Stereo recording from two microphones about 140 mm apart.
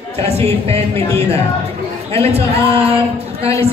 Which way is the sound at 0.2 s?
50° right (ahead or behind).